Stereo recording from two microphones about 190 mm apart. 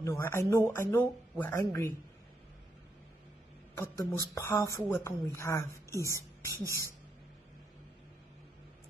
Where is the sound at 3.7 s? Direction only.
15° left (ahead or behind).